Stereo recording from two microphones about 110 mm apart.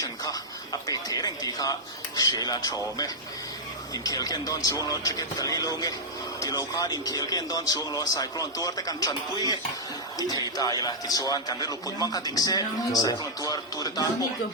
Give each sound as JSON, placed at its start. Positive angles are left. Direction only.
{"t": 0.0, "sound": "a man's voice", "side_deg": 35}